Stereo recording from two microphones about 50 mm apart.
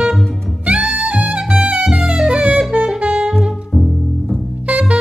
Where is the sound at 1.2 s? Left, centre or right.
Right.